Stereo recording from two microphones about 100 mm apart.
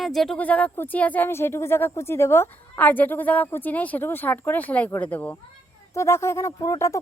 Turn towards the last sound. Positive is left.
turn(degrees=35)  # may be behind; listen again after turning